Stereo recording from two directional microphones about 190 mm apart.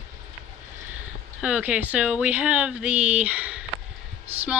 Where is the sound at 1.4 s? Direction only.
5° right (ahead or behind).